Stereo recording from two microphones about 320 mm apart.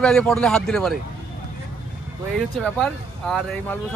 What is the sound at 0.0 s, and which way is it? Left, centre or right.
Speech, centre.